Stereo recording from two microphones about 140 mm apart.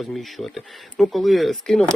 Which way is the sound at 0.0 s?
Centre (ahead or behind).